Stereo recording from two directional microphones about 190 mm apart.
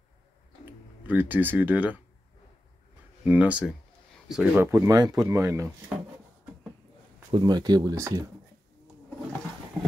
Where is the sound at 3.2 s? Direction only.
10° right (ahead or behind).